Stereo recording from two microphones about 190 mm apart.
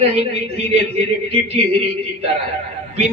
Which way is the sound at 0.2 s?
35° right (ahead or behind).